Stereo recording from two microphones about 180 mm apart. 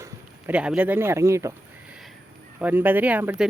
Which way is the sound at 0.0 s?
10° right (ahead or behind).